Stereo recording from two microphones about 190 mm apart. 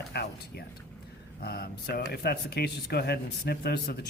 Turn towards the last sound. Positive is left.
turn(degrees=55)  # may be behind; listen again after turning